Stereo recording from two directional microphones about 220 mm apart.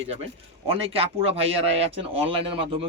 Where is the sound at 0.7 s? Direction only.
25° right (ahead or behind).